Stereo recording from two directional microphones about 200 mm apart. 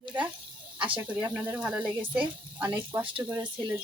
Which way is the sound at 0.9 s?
10° right (ahead or behind).